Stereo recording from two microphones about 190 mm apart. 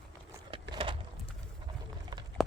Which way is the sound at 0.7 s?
25° right (ahead or behind).